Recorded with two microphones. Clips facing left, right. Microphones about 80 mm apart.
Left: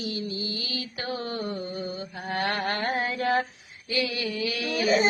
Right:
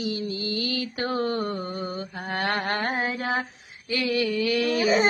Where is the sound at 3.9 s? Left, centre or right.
Right.